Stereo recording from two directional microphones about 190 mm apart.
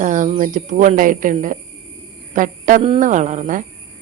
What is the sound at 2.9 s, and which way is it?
Speech, 40° right (ahead or behind).